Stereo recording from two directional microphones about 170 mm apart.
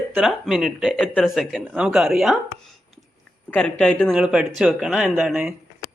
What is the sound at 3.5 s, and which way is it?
Speech, 5° left (ahead or behind).